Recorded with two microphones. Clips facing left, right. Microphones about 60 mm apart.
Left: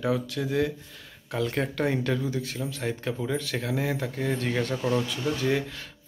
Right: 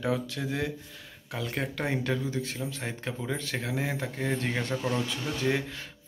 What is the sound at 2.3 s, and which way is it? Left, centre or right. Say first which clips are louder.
Speech: left 2 dB; right.